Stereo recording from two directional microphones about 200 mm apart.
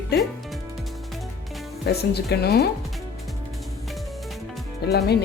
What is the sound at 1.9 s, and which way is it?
Speech, 55° left (ahead or behind).